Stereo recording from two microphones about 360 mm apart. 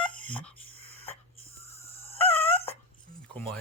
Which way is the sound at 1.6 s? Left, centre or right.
Centre.